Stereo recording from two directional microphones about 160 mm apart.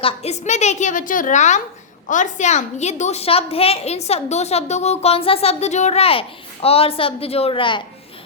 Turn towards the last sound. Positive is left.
turn(degrees=30)  # may be behind; listen again after turning